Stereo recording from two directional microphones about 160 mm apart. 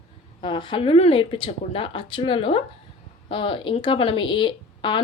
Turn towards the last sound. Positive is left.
turn(degrees=30)  # may be behind; listen again after turning